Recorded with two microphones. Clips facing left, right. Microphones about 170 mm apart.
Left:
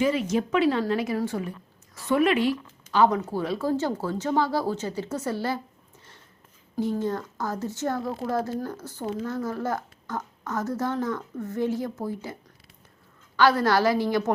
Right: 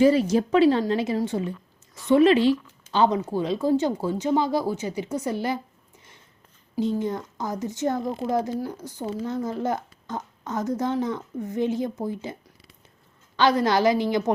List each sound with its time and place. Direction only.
0.0 s a woman's voice: 35° right (ahead or behind); by 5.5 s 15° right (ahead or behind)
6.7 s speech: 20° right (ahead or behind)